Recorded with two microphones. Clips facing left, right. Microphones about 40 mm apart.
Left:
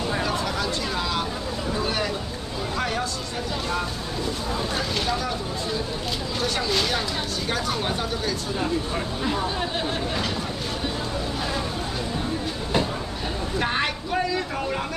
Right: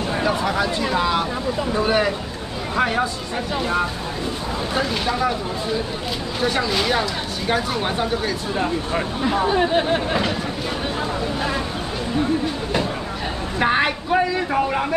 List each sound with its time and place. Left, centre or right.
0.2 s speech: centre
4.7 s speech: centre
6.4 s speech: centre
13.6 s speech: centre